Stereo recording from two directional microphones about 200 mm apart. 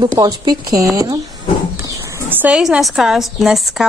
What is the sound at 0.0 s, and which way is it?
Speech, 20° right (ahead or behind).